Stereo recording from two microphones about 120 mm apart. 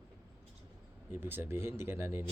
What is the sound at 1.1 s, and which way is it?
A man's voice, 15° right (ahead or behind).